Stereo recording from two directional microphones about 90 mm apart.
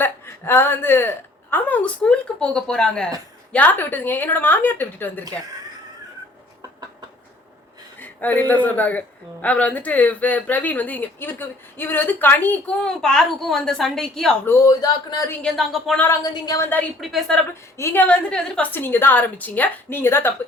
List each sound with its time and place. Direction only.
0.0 s speech: 25° left (ahead or behind)
7.9 s a sound: 20° left (ahead or behind)
8.6 s speech: 20° left (ahead or behind)
12.8 s a woman's voice: 5° left (ahead or behind)
14.6 s a man's voice: 45° left (ahead or behind)
15.4 s a woman's voice: 5° left (ahead or behind)
16.2 s a man's voice: 45° left (ahead or behind)
17.0 s a woman's voice: centre (ahead or behind)
17.5 s speech: 30° left (ahead or behind)
18.0 s a woman's voice: 10° left (ahead or behind)
18.7 s speech: 25° left (ahead or behind)